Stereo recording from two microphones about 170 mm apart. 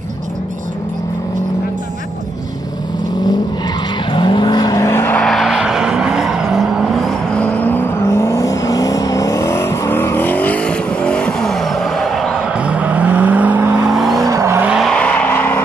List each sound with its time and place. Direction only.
4.1 s vehicle: 30° left (ahead or behind); by 14.2 s centre (ahead or behind)
14.2 s vehicle: 15° right (ahead or behind)
14.7 s vehicle: centre (ahead or behind)